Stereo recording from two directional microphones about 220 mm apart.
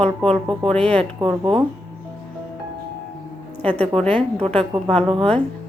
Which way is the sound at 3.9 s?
5° left (ahead or behind).